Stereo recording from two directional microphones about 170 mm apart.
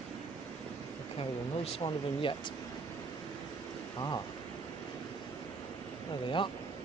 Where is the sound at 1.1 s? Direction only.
30° left (ahead or behind).